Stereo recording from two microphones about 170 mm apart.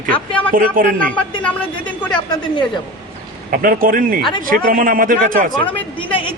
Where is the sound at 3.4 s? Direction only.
55° right (ahead or behind).